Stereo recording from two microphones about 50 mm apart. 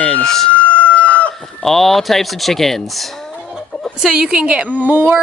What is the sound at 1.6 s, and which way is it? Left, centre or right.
Speech, centre.